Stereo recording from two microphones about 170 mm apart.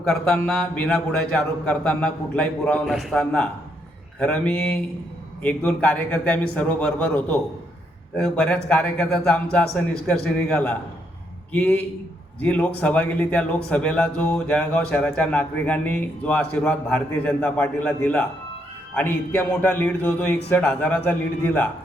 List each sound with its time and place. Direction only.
0.1 s a man's voice: 5° left (ahead or behind)